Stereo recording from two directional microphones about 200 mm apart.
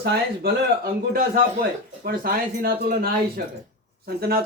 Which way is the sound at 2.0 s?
45° right (ahead or behind).